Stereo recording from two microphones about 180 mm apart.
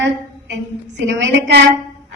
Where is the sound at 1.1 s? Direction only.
85° right.